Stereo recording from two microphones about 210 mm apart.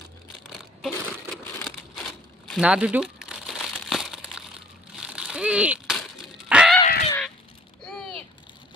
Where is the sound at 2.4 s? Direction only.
Centre (ahead or behind).